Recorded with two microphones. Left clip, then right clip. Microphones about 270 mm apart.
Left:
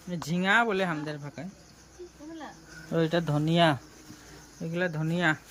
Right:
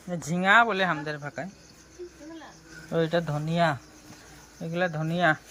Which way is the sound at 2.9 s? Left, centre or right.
Centre.